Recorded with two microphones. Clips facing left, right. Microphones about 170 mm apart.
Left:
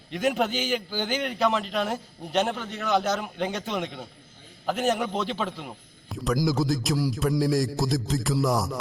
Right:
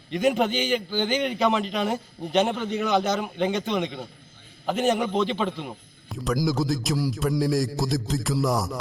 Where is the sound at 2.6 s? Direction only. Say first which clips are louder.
Right 8 dB; 15° right (ahead or behind).